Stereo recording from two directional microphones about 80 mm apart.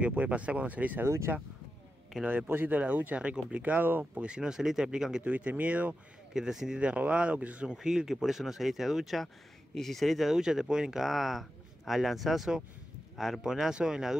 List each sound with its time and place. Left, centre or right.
0.0 s speech: centre
2.2 s speech: right
5.2 s speech: centre
6.3 s speech: centre